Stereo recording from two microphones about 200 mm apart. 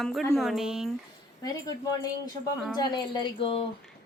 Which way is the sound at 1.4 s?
20° left (ahead or behind).